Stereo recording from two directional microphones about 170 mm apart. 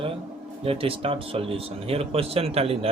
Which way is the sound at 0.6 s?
35° right (ahead or behind).